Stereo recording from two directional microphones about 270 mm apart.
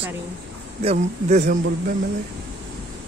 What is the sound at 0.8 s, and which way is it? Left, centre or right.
Speech, right.